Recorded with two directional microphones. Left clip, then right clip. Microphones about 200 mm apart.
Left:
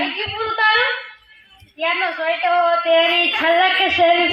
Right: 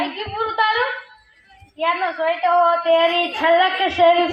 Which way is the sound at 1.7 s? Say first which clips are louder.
Even; 50° left (ahead or behind).